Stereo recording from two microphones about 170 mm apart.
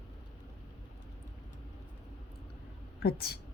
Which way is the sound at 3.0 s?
70° left (ahead or behind).